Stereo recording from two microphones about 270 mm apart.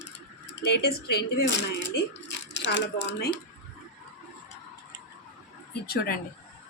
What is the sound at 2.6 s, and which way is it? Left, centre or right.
Speech, left.